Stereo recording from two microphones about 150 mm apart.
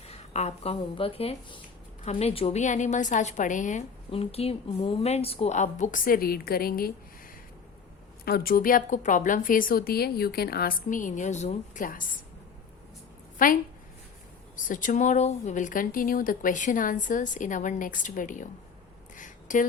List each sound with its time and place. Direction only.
0.0 s a woman's voice: 45° left (ahead or behind)
4.1 s a woman's voice: 40° left (ahead or behind); by 6.9 s 85° left
8.2 s a woman's voice: 85° left; by 12.0 s 65° left (ahead or behind)
13.4 s speech: 65° left (ahead or behind)
19.1 s a sound: 60° left (ahead or behind)